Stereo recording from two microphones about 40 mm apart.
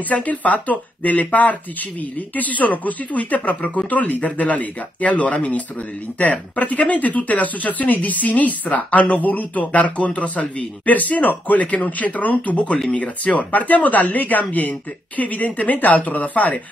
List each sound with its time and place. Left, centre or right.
0.1 s speech: left
12.5 s speech: left